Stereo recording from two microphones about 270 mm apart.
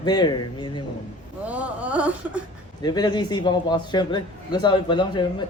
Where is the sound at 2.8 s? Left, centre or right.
Centre.